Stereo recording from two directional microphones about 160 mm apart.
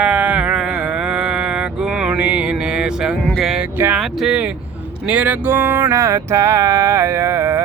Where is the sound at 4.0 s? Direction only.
5° right (ahead or behind).